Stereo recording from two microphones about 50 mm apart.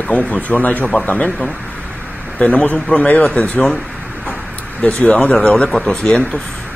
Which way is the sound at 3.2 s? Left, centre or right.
Centre.